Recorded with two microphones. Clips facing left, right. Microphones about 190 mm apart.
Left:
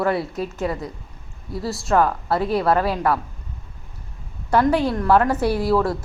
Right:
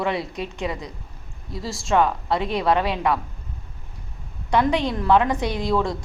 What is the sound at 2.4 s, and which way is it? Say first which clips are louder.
Speech: left 3 dB; 20° right (ahead or behind).